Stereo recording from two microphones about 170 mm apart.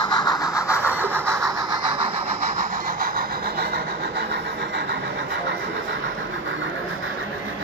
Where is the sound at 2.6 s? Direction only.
55° right (ahead or behind).